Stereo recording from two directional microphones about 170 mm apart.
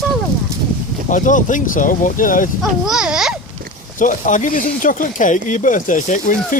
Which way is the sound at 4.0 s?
50° left (ahead or behind).